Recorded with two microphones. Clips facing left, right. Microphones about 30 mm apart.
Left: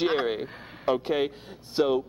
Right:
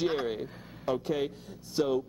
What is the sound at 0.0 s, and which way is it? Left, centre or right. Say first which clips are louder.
Speech: left 4 dB; left.